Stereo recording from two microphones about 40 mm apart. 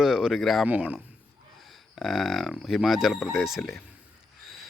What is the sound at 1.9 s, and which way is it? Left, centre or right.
Speech, centre.